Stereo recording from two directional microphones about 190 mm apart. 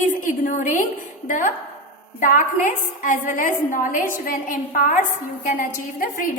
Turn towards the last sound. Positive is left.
turn(degrees=45)  # may be behind; listen again after turning